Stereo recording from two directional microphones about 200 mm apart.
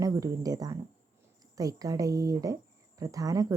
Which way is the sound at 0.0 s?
15° right (ahead or behind).